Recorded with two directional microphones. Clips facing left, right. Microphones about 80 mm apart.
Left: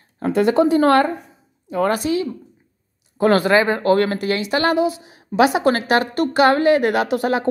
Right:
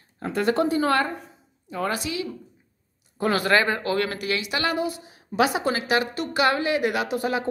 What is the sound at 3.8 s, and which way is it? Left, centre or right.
Speech, left.